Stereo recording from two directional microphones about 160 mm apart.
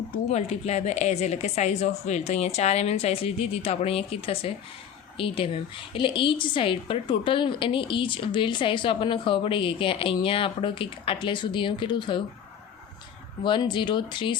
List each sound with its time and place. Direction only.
0.3 s a woman's voice: 40° left (ahead or behind)
13.4 s speech: 30° left (ahead or behind)